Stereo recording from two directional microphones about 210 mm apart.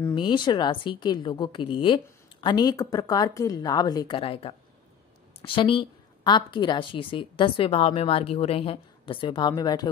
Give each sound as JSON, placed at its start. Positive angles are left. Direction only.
{"t": 0.0, "sound": "a woman's voice", "side_deg": 20}